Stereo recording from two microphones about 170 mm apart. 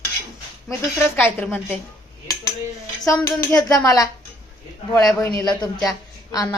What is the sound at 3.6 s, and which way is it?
Speech, 20° left (ahead or behind).